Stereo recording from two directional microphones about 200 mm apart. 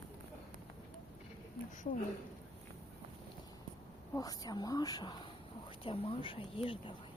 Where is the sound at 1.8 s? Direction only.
40° left (ahead or behind).